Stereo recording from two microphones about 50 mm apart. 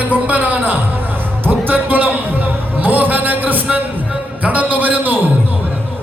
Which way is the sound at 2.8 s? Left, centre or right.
Right.